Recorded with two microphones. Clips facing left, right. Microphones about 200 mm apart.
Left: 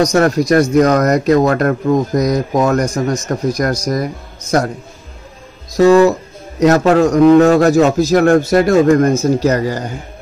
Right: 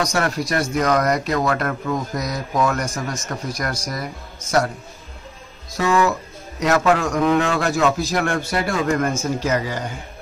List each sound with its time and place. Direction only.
0.0 s a man's voice: 40° left (ahead or behind)
5.8 s a man's voice: 40° left (ahead or behind)